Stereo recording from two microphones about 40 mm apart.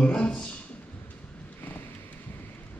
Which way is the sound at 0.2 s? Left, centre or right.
Left.